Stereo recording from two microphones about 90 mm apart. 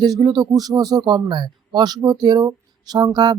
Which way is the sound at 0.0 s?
50° right (ahead or behind).